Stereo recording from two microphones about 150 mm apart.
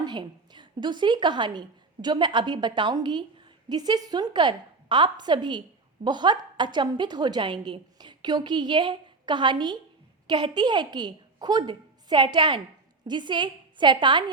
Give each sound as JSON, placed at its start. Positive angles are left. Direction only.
{"t": 0.0, "sound": "a woman's voice", "side_deg": -30}